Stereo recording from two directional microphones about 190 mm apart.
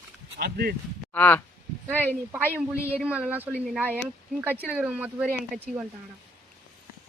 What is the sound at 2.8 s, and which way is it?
Speech, 15° left (ahead or behind).